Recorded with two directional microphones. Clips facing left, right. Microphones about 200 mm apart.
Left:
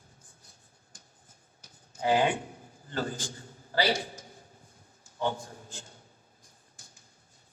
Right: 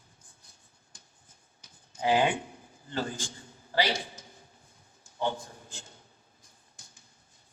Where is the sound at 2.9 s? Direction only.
45° left (ahead or behind).